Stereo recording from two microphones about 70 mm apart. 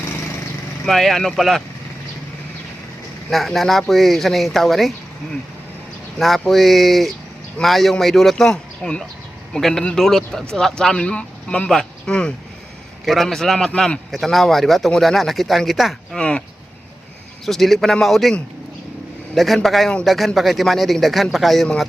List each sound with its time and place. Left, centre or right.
0.9 s speech: centre
3.2 s speech: centre
6.1 s speech: centre
16.1 s speech: centre
17.4 s a man's voice: centre